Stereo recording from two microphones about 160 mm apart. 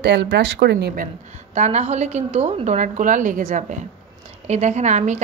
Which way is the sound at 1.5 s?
45° right (ahead or behind).